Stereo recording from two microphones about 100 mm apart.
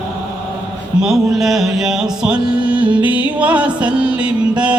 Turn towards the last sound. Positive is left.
turn(degrees=-10)  # may be behind; listen again after turning